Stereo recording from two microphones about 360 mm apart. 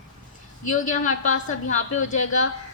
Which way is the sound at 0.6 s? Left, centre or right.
Left.